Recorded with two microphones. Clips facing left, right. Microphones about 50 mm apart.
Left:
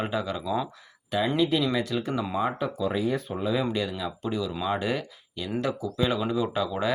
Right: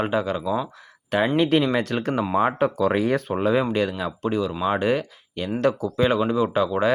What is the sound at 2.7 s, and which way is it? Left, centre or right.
Speech, right.